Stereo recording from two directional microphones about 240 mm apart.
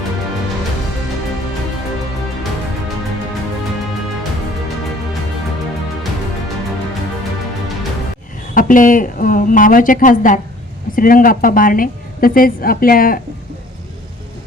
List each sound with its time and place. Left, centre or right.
8.5 s a woman's voice: left